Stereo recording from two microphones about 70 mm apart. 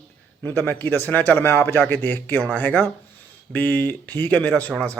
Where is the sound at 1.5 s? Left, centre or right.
Left.